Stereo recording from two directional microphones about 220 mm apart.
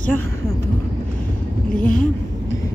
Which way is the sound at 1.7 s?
35° left (ahead or behind).